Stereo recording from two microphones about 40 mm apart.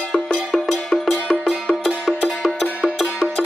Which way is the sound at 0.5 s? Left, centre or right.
Centre.